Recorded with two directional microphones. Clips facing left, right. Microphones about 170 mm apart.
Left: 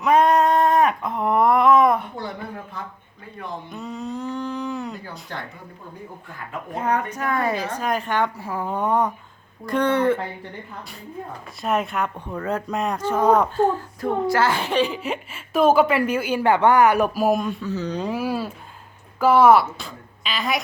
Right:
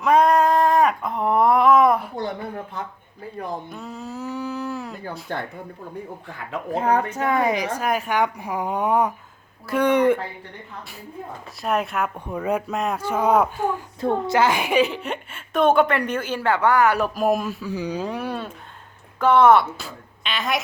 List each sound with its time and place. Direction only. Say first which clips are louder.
0.0 s a sound: even; centre (ahead or behind)
2.1 s speech: right 3 dB; 25° right (ahead or behind)
3.7 s a sound: left 3 dB; centre (ahead or behind)
6.8 s a woman's voice: right 2 dB; 30° right (ahead or behind)
11.6 s a woman's voice: even; centre (ahead or behind)
14.0 s a woman's voice: right 1 dB; 25° right (ahead or behind)
14.9 s speech: left 2 dB; 5° left (ahead or behind)
17.2 s speech: left 1 dB; centre (ahead or behind)
18.1 s speech: left 3 dB; 5° left (ahead or behind)